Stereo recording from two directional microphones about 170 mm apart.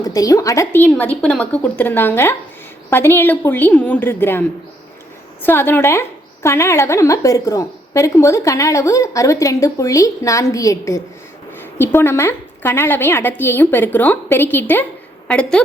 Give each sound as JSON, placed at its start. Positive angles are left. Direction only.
{"t": 0.0, "sound": "a woman's voice", "side_deg": 20}